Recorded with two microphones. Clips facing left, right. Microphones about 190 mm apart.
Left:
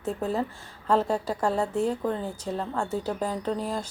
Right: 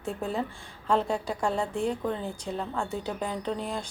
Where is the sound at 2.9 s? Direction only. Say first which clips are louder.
Left 3 dB; 40° left (ahead or behind).